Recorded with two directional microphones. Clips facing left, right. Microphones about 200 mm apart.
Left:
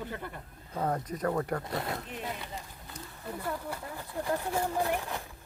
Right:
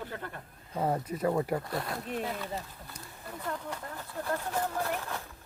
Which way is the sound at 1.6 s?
20° left (ahead or behind).